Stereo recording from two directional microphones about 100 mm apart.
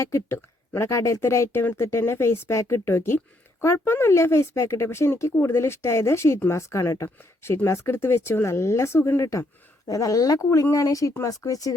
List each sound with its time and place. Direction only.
0.0 s speech: 25° left (ahead or behind)